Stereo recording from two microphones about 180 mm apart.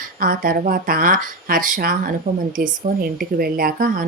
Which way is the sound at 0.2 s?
50° right (ahead or behind).